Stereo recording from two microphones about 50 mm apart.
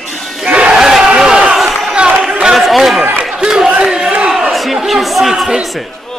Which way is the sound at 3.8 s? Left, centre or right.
Centre.